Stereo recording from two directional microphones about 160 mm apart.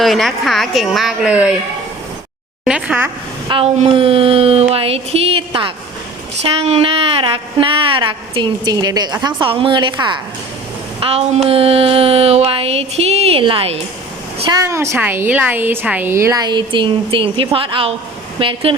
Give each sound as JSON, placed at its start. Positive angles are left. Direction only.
{"t": 0.0, "sound": "a woman's voice", "side_deg": 0}
{"t": 2.6, "sound": "speech", "side_deg": -5}
{"t": 3.5, "sound": "a woman's voice", "side_deg": -35}
{"t": 11.0, "sound": "a woman's voice", "side_deg": -40}
{"t": 14.5, "sound": "a woman's voice", "side_deg": -20}